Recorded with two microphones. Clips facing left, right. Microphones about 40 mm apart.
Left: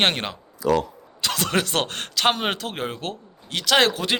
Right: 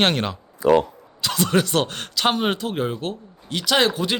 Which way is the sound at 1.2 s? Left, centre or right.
Left.